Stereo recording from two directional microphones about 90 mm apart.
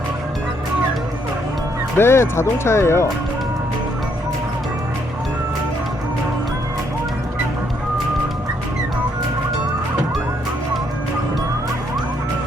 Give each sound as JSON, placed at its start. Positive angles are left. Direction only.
{"t": 2.0, "sound": "speech", "side_deg": 30}